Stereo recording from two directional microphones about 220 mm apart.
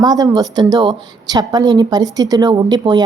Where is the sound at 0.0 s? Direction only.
20° right (ahead or behind).